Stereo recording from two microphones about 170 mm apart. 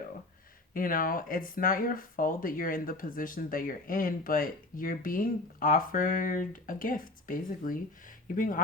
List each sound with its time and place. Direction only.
0.7 s speech: 55° left (ahead or behind)